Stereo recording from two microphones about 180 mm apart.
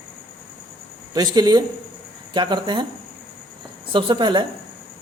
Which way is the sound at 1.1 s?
20° right (ahead or behind).